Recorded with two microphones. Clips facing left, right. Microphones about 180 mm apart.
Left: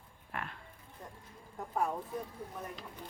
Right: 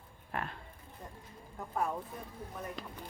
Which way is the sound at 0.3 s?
35° right (ahead or behind).